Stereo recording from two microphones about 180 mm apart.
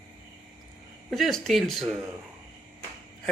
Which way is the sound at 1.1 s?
Centre (ahead or behind).